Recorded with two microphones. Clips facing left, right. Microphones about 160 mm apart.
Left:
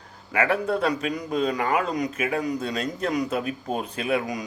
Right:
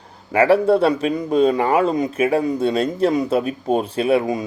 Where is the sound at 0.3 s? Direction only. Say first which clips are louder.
Right 9 dB; 30° right (ahead or behind).